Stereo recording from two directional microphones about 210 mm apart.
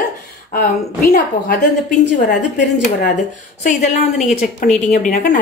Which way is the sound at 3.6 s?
35° left (ahead or behind).